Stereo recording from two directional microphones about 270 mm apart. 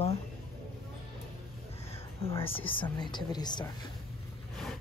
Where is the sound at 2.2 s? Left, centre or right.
Left.